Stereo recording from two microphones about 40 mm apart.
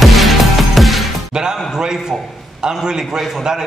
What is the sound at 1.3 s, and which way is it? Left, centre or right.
Music, centre.